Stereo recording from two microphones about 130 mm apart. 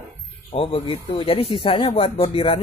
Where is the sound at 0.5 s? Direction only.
45° left (ahead or behind).